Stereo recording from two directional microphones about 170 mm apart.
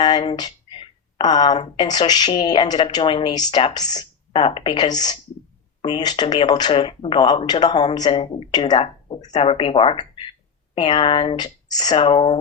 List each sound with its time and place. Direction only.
0.0 s a sound: 25° left (ahead or behind)
1.5 s speech: 40° left (ahead or behind)
1.9 s speech: 25° left (ahead or behind)